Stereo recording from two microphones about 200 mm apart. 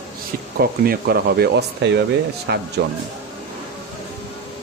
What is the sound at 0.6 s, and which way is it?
Speech, 50° right (ahead or behind).